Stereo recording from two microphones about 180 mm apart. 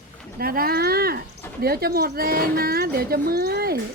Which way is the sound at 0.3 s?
55° right (ahead or behind).